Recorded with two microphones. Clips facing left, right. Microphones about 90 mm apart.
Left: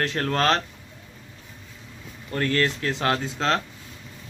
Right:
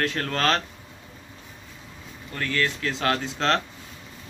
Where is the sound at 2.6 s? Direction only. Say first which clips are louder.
Left 1 dB; 25° left (ahead or behind).